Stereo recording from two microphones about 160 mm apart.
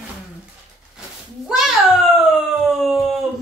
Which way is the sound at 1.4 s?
5° right (ahead or behind).